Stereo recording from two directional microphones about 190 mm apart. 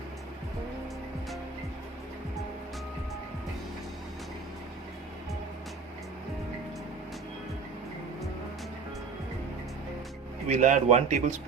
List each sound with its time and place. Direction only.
10.5 s speech: 40° right (ahead or behind)